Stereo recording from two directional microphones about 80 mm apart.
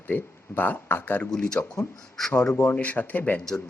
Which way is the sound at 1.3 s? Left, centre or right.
Centre.